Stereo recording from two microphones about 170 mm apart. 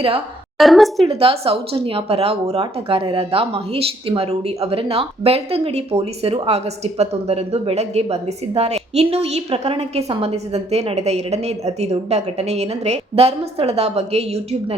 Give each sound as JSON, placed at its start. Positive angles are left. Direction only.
{"t": 0.6, "sound": "a woman's voice", "side_deg": 0}
{"t": 1.0, "sound": "speech", "side_deg": -35}